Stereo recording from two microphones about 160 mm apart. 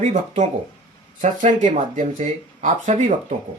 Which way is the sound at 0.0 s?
50° right (ahead or behind).